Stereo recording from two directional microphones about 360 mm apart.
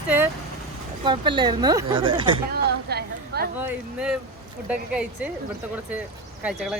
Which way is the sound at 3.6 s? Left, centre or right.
Centre.